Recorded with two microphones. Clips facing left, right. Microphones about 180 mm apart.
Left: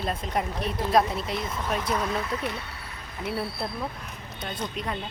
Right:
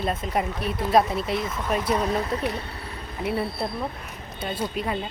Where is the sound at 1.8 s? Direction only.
30° right (ahead or behind).